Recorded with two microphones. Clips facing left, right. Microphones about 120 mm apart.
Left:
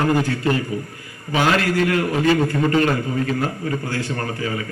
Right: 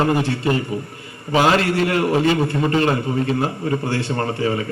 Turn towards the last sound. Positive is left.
turn(degrees=-30)  # may be behind; listen again after turning